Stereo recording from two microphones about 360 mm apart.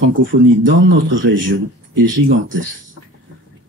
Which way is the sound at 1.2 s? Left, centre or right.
Right.